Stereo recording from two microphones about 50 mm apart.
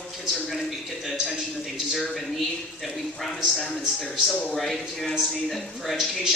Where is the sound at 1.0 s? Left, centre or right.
Centre.